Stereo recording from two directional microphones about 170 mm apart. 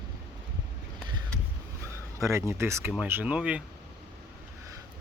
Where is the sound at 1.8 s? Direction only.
15° right (ahead or behind).